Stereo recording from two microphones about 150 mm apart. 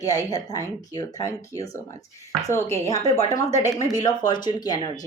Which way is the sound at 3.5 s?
50° left (ahead or behind).